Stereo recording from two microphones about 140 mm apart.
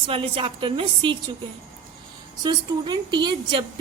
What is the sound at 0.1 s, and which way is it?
A woman's voice, 40° right (ahead or behind).